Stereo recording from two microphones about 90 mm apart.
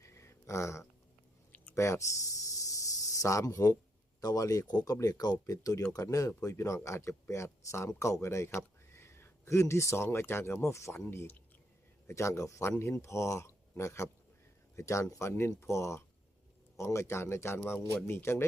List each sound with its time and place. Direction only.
0.0 s a sound: 30° left (ahead or behind)
1.7 s speech: 30° left (ahead or behind)
2.5 s cricket: 40° left (ahead or behind)
4.2 s speech: 40° left (ahead or behind)
15.3 s a man's voice: 30° left (ahead or behind)